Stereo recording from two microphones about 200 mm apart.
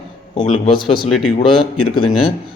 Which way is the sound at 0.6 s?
25° left (ahead or behind).